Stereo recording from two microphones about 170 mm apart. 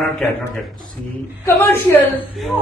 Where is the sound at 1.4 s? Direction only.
15° left (ahead or behind).